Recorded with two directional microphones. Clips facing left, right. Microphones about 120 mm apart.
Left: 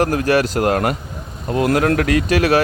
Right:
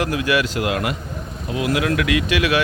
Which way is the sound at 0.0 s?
45° left (ahead or behind).